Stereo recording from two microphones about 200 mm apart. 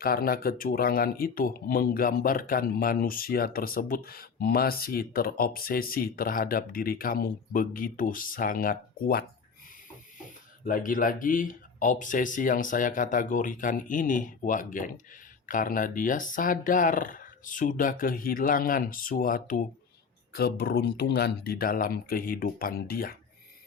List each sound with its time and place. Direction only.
0.0 s speech: 50° left (ahead or behind)
10.7 s speech: 45° left (ahead or behind)